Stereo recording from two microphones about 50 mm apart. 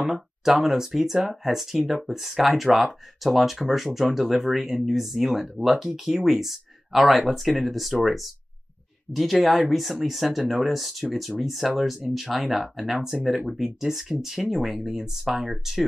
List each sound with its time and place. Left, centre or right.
0.0 s speech: centre